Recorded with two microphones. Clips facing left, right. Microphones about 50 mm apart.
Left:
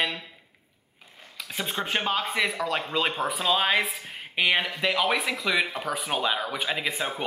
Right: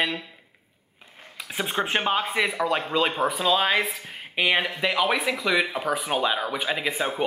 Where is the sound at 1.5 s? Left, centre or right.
Centre.